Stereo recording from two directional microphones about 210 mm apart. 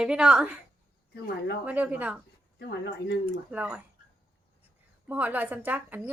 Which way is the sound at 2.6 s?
55° left (ahead or behind).